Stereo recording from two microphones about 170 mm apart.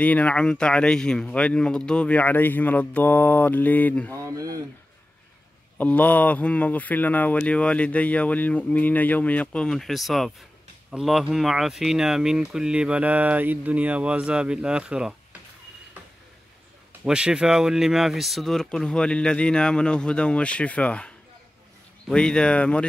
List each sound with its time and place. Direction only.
0.0 s speech: 10° left (ahead or behind)
4.1 s speech: 20° right (ahead or behind)
5.8 s speech: 10° left (ahead or behind)
17.0 s speech: 5° right (ahead or behind)